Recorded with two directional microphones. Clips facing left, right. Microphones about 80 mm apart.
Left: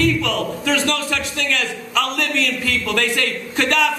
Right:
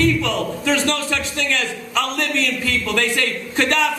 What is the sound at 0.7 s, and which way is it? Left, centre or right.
A man's voice, right.